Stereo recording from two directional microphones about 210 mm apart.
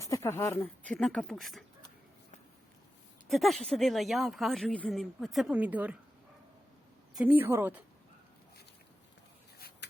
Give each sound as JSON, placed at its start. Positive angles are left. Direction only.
{"t": 0.0, "sound": "speech", "side_deg": 15}
{"t": 3.2, "sound": "speech", "side_deg": 0}
{"t": 7.2, "sound": "a woman's voice", "side_deg": -10}
{"t": 9.6, "sound": "a sound", "side_deg": 45}